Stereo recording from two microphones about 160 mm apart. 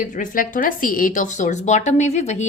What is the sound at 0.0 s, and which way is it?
A woman's voice, 55° left (ahead or behind).